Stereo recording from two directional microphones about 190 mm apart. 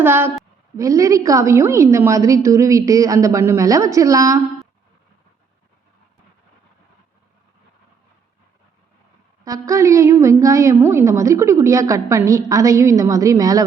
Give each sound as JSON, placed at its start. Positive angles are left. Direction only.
{"t": 0.0, "sound": "a woman's voice", "side_deg": -10}
{"t": 9.4, "sound": "a woman's voice", "side_deg": -15}